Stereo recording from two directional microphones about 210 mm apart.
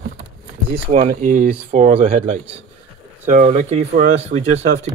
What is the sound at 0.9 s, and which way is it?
Speech, 35° right (ahead or behind).